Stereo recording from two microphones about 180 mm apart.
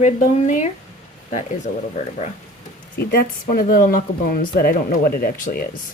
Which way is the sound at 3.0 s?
60° left (ahead or behind).